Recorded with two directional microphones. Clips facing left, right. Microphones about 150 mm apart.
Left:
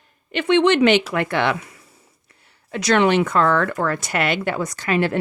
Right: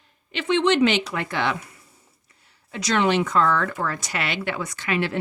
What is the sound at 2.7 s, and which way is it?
A woman's voice, 60° left (ahead or behind).